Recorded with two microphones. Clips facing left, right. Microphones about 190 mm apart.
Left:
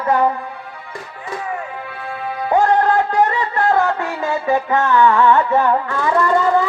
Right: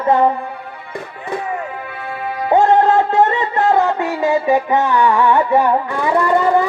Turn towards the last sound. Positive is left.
turn(degrees=-15)  # may be behind; listen again after turning